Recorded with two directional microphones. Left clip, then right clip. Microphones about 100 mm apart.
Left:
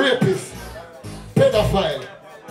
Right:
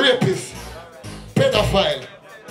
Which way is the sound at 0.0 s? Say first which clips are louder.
Right 2 dB; 20° right (ahead or behind).